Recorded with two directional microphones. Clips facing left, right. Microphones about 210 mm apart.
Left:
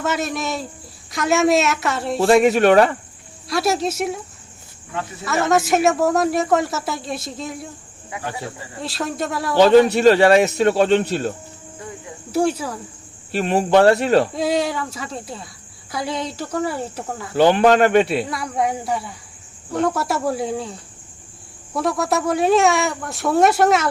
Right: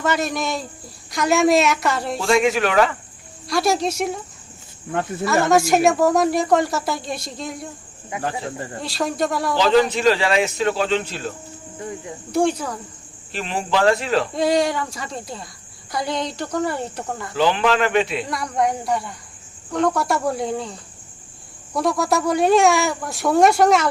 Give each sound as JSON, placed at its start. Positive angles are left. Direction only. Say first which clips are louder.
{"t": 0.0, "sound": "a man's voice", "louder": "right 1 dB", "side_deg": 0}
{"t": 2.2, "sound": "speech", "louder": "left 5 dB", "side_deg": 35}
{"t": 3.4, "sound": "a man's voice", "louder": "even", "side_deg": 0}
{"t": 5.2, "sound": "a man's voice", "louder": "right 1 dB", "side_deg": 0}
{"t": 8.1, "sound": "speech", "louder": "right 4 dB", "side_deg": -20}
{"t": 8.8, "sound": "a man's voice", "louder": "right 2 dB", "side_deg": 0}
{"t": 9.9, "sound": "speech", "louder": "left 6 dB", "side_deg": 45}
{"t": 12.3, "sound": "a man's voice", "louder": "even", "side_deg": 5}
{"t": 13.4, "sound": "speech", "louder": "left 5 dB", "side_deg": 50}
{"t": 14.3, "sound": "a man's voice", "louder": "right 2 dB", "side_deg": 0}
{"t": 17.3, "sound": "speech", "louder": "left 5 dB", "side_deg": 50}
{"t": 17.6, "sound": "speech", "louder": "left 5 dB", "side_deg": 40}
{"t": 18.2, "sound": "a man's voice", "louder": "even", "side_deg": 5}